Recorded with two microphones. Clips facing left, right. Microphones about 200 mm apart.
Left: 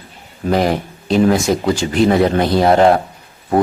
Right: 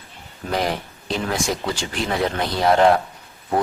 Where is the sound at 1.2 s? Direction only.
40° left (ahead or behind).